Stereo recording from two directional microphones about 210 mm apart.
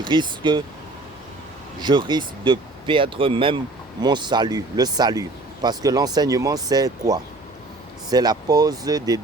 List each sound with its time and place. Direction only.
0.0 s speech: 20° right (ahead or behind)
1.8 s speech: 20° right (ahead or behind)